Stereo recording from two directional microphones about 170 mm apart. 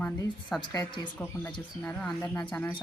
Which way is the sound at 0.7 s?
20° left (ahead or behind).